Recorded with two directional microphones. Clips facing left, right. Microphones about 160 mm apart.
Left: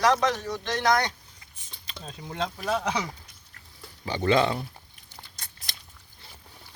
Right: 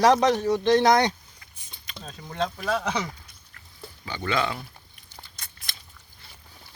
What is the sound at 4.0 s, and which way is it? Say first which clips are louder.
Speech: left 5 dB; 35° left (ahead or behind).